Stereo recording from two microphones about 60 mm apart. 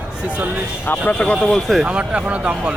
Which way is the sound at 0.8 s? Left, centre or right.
Left.